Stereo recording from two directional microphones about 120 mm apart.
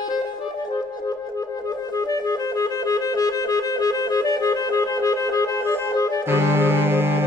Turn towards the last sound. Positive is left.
turn(degrees=-20)  # may be behind; listen again after turning